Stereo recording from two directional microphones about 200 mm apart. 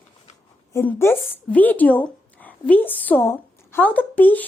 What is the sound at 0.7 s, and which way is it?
Speech, 10° left (ahead or behind).